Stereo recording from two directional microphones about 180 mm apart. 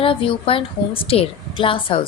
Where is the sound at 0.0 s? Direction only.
30° left (ahead or behind).